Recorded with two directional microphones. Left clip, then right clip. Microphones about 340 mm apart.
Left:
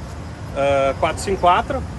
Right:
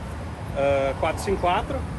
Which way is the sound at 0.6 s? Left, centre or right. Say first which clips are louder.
Left 5 dB; left.